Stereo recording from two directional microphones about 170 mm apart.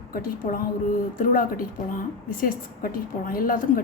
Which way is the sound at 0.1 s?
60° left (ahead or behind).